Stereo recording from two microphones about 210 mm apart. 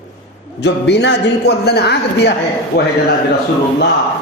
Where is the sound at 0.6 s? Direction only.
55° left (ahead or behind).